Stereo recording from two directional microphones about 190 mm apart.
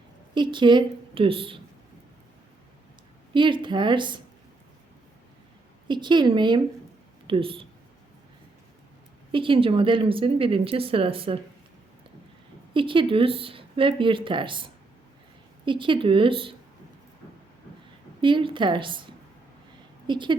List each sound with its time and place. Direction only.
0.3 s a woman's voice: 25° right (ahead or behind)
3.3 s speech: 25° right (ahead or behind)
5.9 s speech: 25° right (ahead or behind)
9.3 s speech: 25° right (ahead or behind)
12.7 s speech: 25° right (ahead or behind)
18.2 s speech: 25° right (ahead or behind)
20.1 s a woman's voice: 25° right (ahead or behind)